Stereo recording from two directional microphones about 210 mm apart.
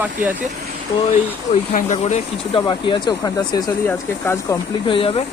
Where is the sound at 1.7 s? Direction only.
35° left (ahead or behind).